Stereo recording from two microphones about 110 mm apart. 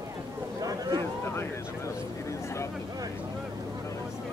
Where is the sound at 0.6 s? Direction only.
35° right (ahead or behind).